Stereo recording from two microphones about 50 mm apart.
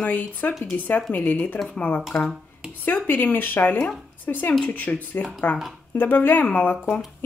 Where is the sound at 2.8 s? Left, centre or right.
Left.